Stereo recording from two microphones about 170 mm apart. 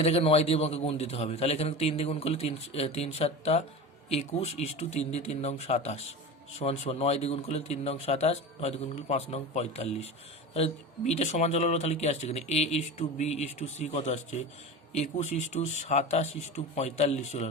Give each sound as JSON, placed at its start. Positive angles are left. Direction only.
{"t": 0.0, "sound": "speech", "side_deg": 35}